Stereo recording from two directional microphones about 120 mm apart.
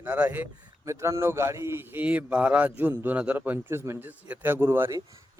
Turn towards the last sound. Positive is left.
turn(degrees=-20)  # may be behind; listen again after turning